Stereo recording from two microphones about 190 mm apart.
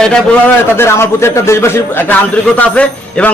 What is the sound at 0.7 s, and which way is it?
A man's voice, 15° left (ahead or behind).